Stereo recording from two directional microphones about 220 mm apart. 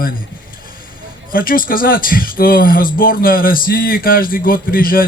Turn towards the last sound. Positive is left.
turn(degrees=40)  # may be behind; listen again after turning